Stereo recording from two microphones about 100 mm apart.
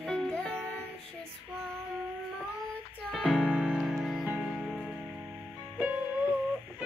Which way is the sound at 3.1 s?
Centre (ahead or behind).